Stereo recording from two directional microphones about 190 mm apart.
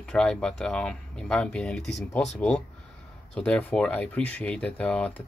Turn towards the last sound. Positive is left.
turn(degrees=5)  # may be behind; listen again after turning